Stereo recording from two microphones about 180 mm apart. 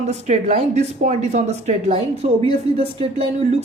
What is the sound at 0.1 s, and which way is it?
Speech, 40° right (ahead or behind).